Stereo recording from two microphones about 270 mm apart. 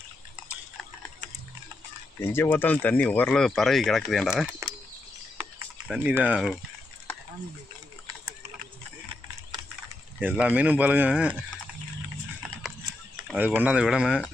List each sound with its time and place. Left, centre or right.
2.2 s speech: centre
5.9 s speech: centre
10.2 s speech: centre
13.2 s speech: centre